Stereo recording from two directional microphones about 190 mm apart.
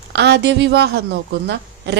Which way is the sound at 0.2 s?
60° right (ahead or behind).